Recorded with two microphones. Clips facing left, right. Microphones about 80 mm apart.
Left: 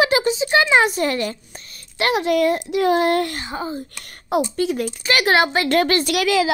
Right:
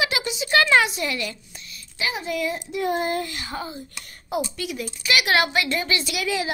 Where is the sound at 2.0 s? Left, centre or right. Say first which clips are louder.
Left 9 dB; left.